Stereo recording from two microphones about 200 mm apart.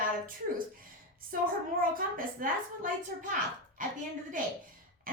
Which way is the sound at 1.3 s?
45° right (ahead or behind).